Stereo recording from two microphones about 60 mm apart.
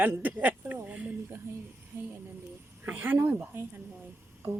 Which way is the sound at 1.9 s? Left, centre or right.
Right.